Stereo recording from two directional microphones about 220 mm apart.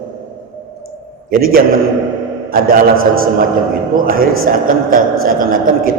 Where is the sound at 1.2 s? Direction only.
40° right (ahead or behind).